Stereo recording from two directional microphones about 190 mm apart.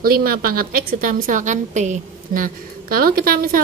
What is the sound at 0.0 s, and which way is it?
A woman's voice, 50° right (ahead or behind).